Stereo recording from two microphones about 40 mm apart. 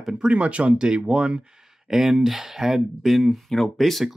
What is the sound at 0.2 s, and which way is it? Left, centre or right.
Speech, right.